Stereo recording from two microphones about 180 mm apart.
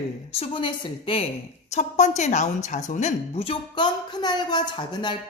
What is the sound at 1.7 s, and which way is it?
A woman's voice, 40° left (ahead or behind).